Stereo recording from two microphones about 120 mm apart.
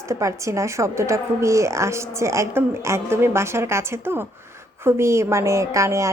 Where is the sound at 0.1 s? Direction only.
25° right (ahead or behind).